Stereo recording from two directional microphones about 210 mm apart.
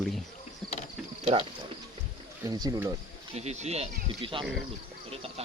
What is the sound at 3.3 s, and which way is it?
Speech, 30° right (ahead or behind).